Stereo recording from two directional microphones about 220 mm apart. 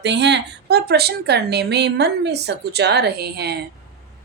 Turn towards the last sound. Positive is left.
turn(degrees=-45)  # may be behind; listen again after turning